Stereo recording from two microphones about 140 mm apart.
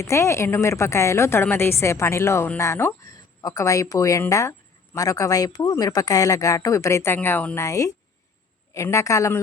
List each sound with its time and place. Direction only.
0.0 s speech: 20° left (ahead or behind)